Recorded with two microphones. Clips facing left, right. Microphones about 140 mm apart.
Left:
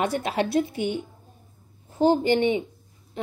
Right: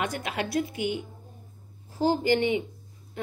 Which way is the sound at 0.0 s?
30° left (ahead or behind).